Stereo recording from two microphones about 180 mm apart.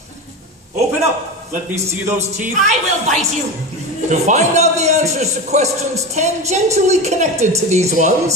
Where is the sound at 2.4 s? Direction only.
40° right (ahead or behind).